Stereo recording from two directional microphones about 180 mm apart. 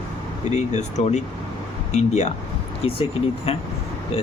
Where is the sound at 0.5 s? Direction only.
40° left (ahead or behind).